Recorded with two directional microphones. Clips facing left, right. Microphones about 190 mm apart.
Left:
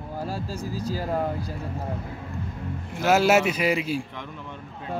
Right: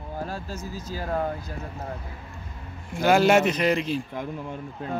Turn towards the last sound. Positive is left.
turn(degrees=5)  # may be behind; listen again after turning